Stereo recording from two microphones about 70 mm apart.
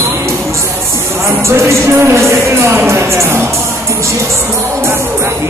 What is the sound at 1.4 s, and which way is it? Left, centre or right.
Speech, right.